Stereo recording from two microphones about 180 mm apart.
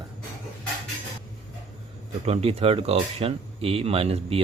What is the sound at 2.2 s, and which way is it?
Speech, 35° right (ahead or behind).